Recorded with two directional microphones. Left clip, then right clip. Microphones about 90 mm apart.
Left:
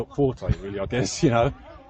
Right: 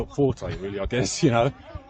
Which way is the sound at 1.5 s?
35° right (ahead or behind).